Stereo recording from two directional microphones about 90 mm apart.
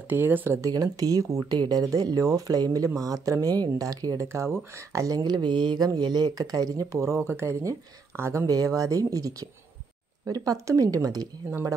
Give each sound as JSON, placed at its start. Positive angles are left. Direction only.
{"t": 0.1, "sound": "speech", "side_deg": -25}
{"t": 0.6, "sound": "speech", "side_deg": -45}